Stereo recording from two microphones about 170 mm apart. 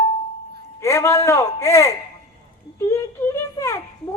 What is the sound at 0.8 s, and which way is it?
A man's voice, 15° left (ahead or behind).